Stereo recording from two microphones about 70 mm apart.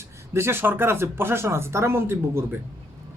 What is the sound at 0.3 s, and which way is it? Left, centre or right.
Speech, right.